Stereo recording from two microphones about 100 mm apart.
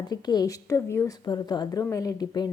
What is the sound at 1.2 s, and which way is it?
A woman's voice, 45° left (ahead or behind).